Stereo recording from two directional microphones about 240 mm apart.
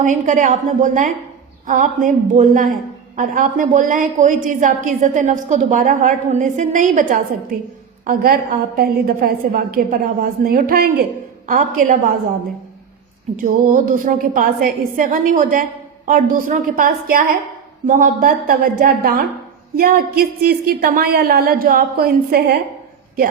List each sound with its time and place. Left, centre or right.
0.0 s a woman's voice: right
13.3 s a woman's voice: right